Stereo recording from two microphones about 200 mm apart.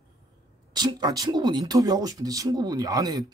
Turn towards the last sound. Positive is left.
turn(degrees=-20)  # may be behind; listen again after turning